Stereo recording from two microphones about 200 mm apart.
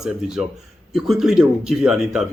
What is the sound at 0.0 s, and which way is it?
Speech, centre (ahead or behind).